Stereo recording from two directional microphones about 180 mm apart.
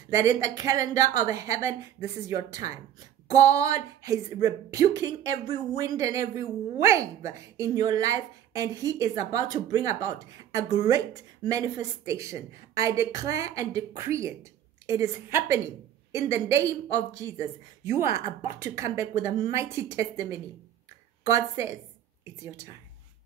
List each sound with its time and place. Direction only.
0.1 s a woman's voice: 20° right (ahead or behind)